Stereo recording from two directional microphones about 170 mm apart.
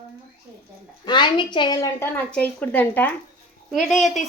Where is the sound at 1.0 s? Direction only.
25° left (ahead or behind).